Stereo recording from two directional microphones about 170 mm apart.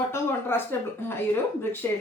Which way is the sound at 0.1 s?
15° left (ahead or behind).